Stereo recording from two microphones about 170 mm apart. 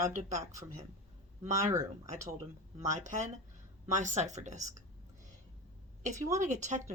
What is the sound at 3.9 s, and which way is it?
Speech, 45° right (ahead or behind).